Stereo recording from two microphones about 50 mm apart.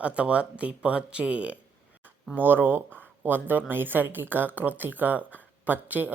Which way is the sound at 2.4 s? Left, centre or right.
Right.